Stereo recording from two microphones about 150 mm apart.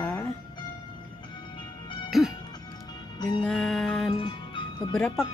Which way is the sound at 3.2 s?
30° left (ahead or behind).